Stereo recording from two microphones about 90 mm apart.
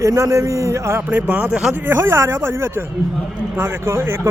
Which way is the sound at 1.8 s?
30° right (ahead or behind).